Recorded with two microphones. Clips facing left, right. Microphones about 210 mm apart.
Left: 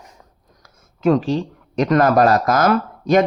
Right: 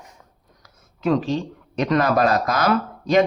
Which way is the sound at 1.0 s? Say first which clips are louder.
Left 4 dB; 45° left (ahead or behind).